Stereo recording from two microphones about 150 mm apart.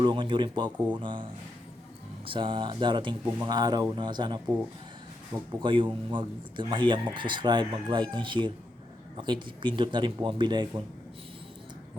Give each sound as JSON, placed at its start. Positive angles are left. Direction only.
{"t": 0.0, "sound": "speech", "side_deg": -30}